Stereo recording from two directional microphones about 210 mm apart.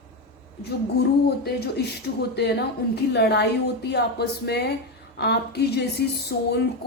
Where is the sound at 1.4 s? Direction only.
50° left (ahead or behind).